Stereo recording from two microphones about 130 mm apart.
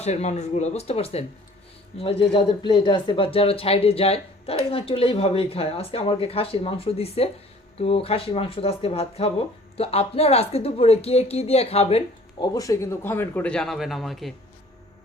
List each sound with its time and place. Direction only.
0.0 s speech: 60° left (ahead or behind)
12.4 s a man's voice: 25° left (ahead or behind); by 14.3 s centre (ahead or behind)